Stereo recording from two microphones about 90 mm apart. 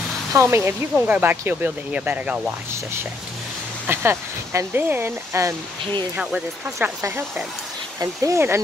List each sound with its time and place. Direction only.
0.3 s speech: 30° right (ahead or behind)
3.8 s speech: 25° right (ahead or behind)
5.3 s speech: 35° right (ahead or behind)
6.1 s speech: 10° right (ahead or behind)
7.0 s speech: 30° right (ahead or behind)